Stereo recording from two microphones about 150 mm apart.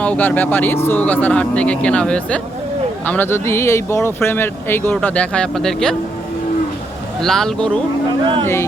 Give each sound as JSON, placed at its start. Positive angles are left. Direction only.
{"t": 0.0, "sound": "speech", "side_deg": 10}
{"t": 7.2, "sound": "speech", "side_deg": 5}
{"t": 8.2, "sound": "speech", "side_deg": -35}